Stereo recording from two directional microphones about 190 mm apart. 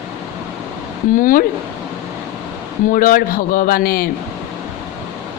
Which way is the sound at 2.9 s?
45° left (ahead or behind).